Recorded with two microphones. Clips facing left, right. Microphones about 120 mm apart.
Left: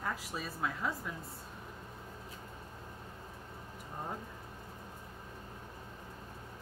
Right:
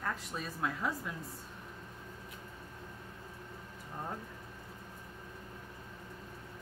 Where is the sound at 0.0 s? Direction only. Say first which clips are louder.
Even; 5° left (ahead or behind).